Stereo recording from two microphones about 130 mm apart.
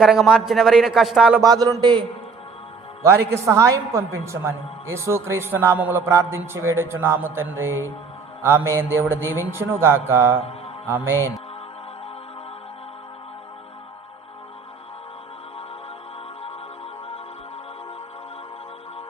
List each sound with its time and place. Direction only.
0.0 s a man's voice: 5° right (ahead or behind)
1.4 s a man's voice: 30° right (ahead or behind)
3.0 s a man's voice: 20° right (ahead or behind)